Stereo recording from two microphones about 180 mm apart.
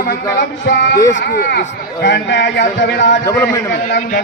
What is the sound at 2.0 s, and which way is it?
Speech, 80° left.